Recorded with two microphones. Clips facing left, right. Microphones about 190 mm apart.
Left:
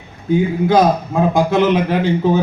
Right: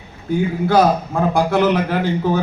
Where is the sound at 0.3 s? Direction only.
20° left (ahead or behind).